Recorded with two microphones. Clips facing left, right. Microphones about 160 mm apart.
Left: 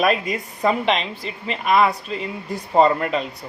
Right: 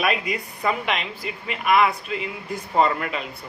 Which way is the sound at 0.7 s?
30° left (ahead or behind).